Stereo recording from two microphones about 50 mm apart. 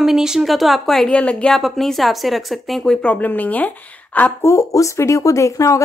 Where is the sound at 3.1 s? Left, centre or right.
Left.